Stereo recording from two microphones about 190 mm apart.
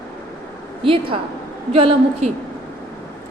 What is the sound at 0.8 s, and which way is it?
A woman's voice, 30° right (ahead or behind).